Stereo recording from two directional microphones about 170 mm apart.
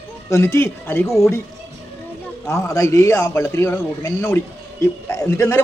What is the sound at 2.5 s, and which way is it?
A man's voice, 20° left (ahead or behind).